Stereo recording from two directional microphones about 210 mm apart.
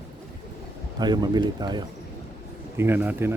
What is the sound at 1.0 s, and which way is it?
A man's voice, 20° right (ahead or behind).